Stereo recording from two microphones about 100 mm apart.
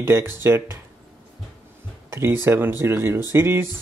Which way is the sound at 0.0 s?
25° right (ahead or behind).